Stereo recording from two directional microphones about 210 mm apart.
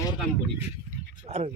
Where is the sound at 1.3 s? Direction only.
30° right (ahead or behind).